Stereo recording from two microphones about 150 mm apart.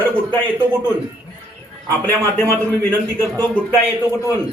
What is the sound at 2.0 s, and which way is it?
Speech, 15° left (ahead or behind).